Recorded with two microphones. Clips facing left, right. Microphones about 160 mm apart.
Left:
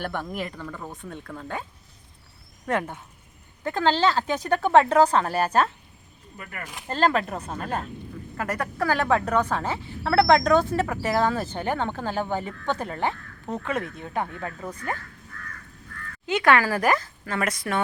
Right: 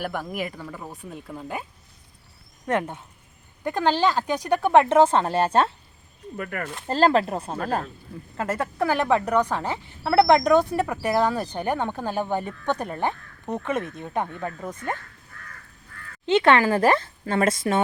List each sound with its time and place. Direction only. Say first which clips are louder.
0.0 s speech: right 1 dB; 10° right (ahead or behind)
2.6 s speech: right 2 dB; 20° right (ahead or behind)
6.3 s speech: right 8 dB; 55° right (ahead or behind)
6.8 s speech: right 3 dB; 30° right (ahead or behind)
14.4 s speech: right 2 dB; centre (ahead or behind)
16.2 s speech: right 3 dB; 25° right (ahead or behind)